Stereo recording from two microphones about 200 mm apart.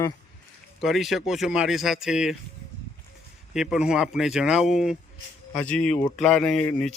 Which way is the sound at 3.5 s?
5° right (ahead or behind).